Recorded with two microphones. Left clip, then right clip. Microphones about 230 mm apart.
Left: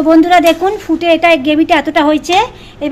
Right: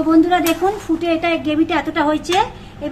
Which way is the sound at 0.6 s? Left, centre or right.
Left.